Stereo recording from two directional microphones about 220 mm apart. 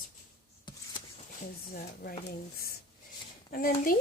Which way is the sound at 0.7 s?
20° left (ahead or behind).